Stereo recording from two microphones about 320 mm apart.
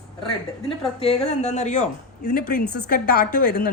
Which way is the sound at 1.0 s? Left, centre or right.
Centre.